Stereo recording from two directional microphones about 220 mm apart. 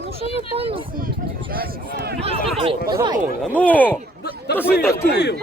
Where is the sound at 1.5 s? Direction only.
45° right (ahead or behind).